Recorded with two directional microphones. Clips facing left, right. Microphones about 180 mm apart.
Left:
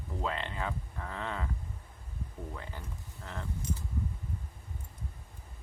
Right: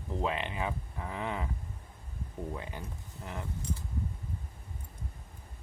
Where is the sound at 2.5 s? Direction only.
15° right (ahead or behind).